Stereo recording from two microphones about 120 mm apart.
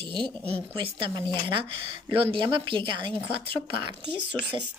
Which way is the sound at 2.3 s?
45° right (ahead or behind).